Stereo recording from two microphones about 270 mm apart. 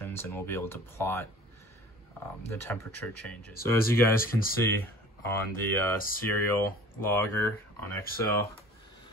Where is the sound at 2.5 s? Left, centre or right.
Centre.